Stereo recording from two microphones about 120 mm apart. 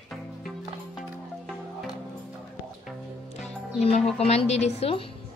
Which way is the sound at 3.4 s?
65° left (ahead or behind).